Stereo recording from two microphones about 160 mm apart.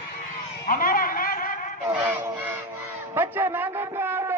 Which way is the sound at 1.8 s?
10° right (ahead or behind).